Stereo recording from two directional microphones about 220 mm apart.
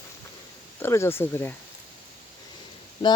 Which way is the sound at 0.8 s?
10° left (ahead or behind).